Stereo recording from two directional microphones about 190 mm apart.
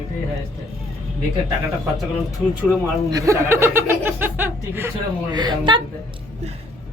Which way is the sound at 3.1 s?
15° right (ahead or behind).